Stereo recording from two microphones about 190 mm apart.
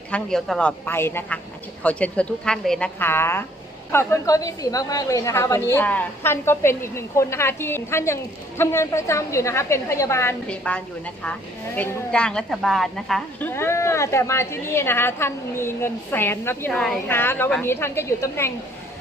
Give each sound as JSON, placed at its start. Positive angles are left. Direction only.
{"t": 0.1, "sound": "a woman's voice", "side_deg": 5}
{"t": 0.9, "sound": "a woman's voice", "side_deg": 10}
{"t": 13.5, "sound": "a woman's voice", "side_deg": 15}